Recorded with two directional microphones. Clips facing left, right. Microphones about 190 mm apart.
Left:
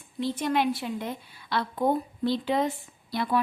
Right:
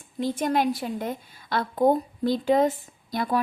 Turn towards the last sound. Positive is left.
turn(degrees=-45)  # may be behind; listen again after turning